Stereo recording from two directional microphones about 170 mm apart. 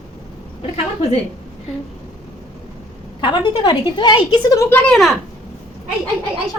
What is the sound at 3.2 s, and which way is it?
Speech, 25° left (ahead or behind).